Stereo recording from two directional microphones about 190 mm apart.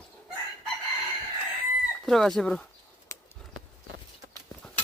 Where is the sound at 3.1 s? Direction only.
15° left (ahead or behind).